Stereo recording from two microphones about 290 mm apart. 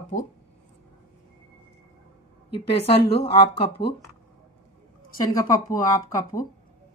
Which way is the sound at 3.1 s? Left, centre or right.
Centre.